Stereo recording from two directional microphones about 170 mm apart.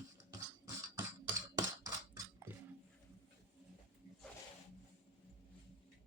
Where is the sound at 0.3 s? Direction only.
20° right (ahead or behind).